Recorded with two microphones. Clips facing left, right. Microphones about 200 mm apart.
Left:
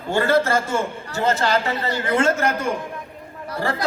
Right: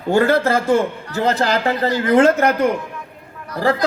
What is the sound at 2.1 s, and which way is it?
Speech, 60° right (ahead or behind).